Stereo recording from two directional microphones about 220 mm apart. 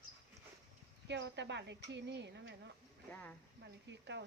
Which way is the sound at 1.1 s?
55° right (ahead or behind).